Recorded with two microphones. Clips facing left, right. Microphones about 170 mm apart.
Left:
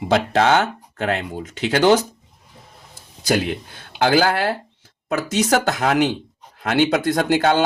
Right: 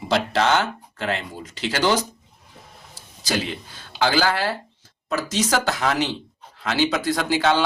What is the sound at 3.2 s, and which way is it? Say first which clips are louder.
Speech: left 6 dB; 55° left (ahead or behind).